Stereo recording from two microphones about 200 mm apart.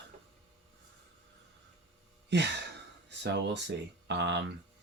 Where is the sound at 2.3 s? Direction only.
55° right (ahead or behind).